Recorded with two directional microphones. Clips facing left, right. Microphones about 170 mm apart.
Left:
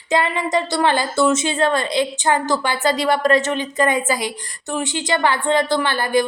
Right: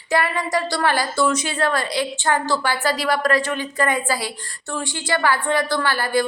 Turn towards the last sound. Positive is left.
turn(degrees=20)  # may be behind; listen again after turning